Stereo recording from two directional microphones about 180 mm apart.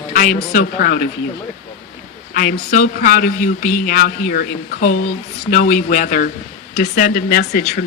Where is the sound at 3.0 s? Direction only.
45° left (ahead or behind).